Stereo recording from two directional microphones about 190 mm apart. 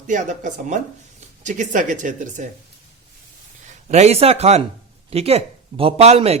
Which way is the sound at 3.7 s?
35° right (ahead or behind).